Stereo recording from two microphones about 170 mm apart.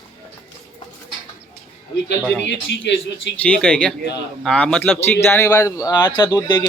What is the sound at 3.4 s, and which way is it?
A man's voice, 10° left (ahead or behind).